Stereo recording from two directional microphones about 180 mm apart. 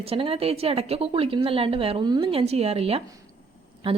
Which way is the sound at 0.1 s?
30° right (ahead or behind).